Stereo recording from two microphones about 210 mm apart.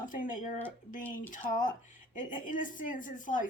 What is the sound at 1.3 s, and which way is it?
A woman's voice, 40° left (ahead or behind).